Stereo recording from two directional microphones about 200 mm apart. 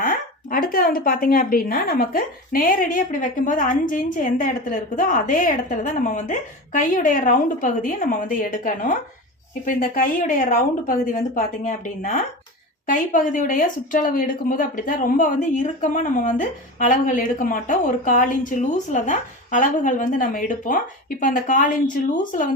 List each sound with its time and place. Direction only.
0.0 s a woman's voice: 45° left (ahead or behind)